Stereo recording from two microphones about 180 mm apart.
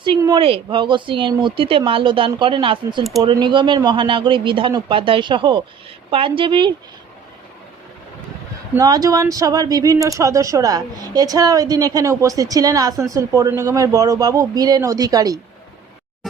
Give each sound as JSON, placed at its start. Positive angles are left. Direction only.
{"t": 0.0, "sound": "speech", "side_deg": -25}
{"t": 8.7, "sound": "speech", "side_deg": -20}
{"t": 16.2, "sound": "a sound", "side_deg": 0}